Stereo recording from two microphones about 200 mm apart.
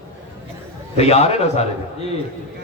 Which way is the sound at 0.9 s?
30° left (ahead or behind).